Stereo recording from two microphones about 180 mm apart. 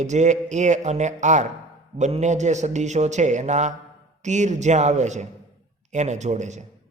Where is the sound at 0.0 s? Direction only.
40° right (ahead or behind).